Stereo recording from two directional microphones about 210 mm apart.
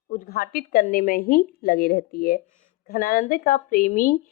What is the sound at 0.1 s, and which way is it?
Speech, 45° left (ahead or behind).